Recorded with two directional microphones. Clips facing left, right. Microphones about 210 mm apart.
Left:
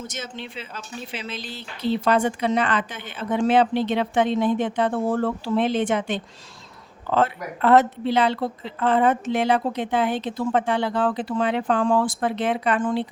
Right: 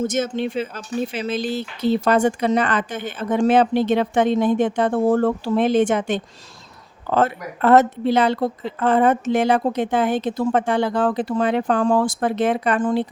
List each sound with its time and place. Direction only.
0.0 s speech: 50° right (ahead or behind)